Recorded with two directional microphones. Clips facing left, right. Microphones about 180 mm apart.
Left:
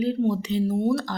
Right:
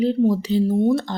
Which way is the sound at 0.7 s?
20° right (ahead or behind).